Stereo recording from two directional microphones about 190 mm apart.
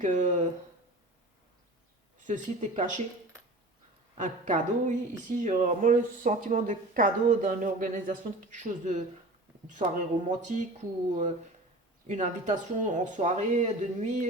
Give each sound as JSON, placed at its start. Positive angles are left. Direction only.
{"t": 0.0, "sound": "speech", "side_deg": -40}
{"t": 2.2, "sound": "speech", "side_deg": -40}
{"t": 4.2, "sound": "speech", "side_deg": -40}
{"t": 10.2, "sound": "speech", "side_deg": -40}
{"t": 12.0, "sound": "speech", "side_deg": -40}